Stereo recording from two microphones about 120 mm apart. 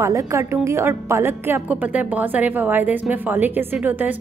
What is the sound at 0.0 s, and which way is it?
A woman's voice, 25° right (ahead or behind).